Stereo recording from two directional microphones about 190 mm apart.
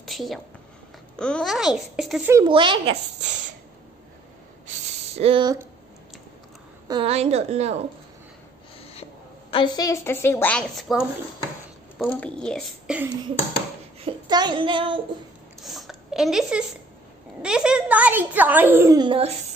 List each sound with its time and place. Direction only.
0.0 s a sound: centre (ahead or behind)
1.1 s speech: 5° left (ahead or behind)
2.4 s child singing: 25° right (ahead or behind)
5.1 s child singing: 30° right (ahead or behind)
6.9 s a woman's voice: 30° right (ahead or behind)
9.5 s a woman's voice: 25° left (ahead or behind); by 12.9 s 5° left (ahead or behind)
14.0 s child singing: 20° right (ahead or behind)
15.6 s a sound: centre (ahead or behind)
17.4 s a child's voice: 5° right (ahead or behind); by 19.3 s 25° right (ahead or behind)